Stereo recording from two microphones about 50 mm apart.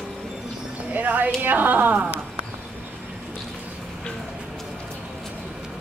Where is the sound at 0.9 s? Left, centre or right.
Right.